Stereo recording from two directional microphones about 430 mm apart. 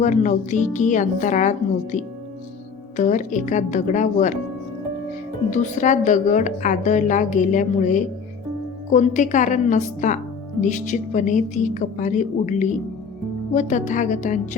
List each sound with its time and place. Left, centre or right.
0.0 s a woman's voice: centre
5.5 s a woman's voice: centre